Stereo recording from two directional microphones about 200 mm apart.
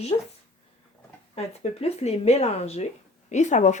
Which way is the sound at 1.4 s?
30° left (ahead or behind).